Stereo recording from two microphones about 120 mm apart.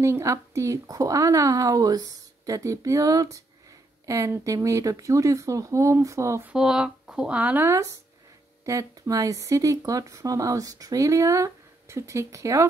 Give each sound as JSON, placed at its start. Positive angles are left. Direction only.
{"t": 0.0, "sound": "speech", "side_deg": -25}
{"t": 6.5, "sound": "speech", "side_deg": -5}
{"t": 8.6, "sound": "speech", "side_deg": -25}